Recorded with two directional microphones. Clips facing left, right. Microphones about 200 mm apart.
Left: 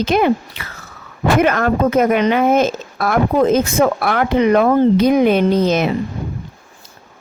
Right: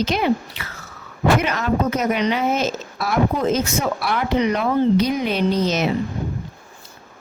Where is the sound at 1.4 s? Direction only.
55° left (ahead or behind).